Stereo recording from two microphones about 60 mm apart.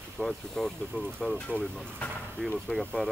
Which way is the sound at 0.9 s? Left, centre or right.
Right.